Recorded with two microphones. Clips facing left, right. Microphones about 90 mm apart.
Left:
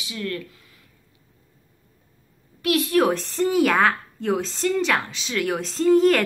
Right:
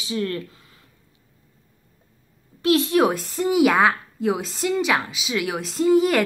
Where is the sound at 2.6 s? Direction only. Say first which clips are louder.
Right 2 dB; 25° right (ahead or behind).